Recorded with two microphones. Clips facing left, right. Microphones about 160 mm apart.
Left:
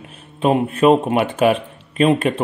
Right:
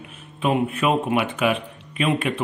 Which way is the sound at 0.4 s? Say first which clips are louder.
Left 6 dB; 35° left (ahead or behind).